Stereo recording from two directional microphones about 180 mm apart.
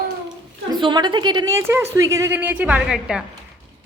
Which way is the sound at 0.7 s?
25° right (ahead or behind).